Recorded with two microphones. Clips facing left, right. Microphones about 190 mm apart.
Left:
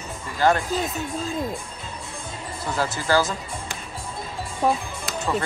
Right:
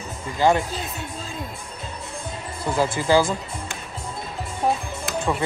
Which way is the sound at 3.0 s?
20° right (ahead or behind).